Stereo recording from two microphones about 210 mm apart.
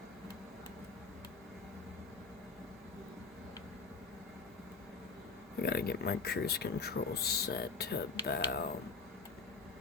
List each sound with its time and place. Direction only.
5.6 s speech: 50° left (ahead or behind)